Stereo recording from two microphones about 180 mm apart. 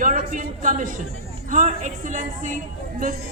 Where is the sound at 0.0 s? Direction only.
45° right (ahead or behind).